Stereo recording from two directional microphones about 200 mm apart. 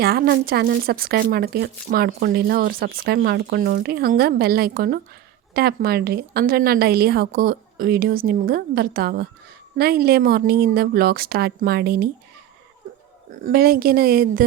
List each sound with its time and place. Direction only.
0.0 s speech: 50° right (ahead or behind)
13.3 s speech: 45° right (ahead or behind)